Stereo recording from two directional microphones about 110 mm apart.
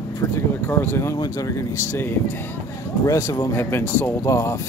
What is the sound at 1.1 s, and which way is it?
Speech, 30° left (ahead or behind).